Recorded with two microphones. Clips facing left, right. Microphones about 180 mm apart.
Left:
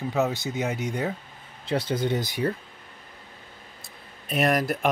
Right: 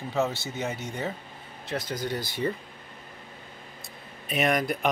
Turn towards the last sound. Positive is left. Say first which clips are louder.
# left 2 dB
turn(degrees=0)  # may be behind; listen again after turning